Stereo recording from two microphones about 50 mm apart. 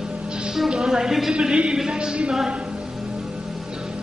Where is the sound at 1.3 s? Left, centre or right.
Centre.